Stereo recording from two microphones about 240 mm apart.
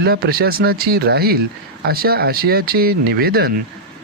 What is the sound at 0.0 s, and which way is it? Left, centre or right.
Speech, right.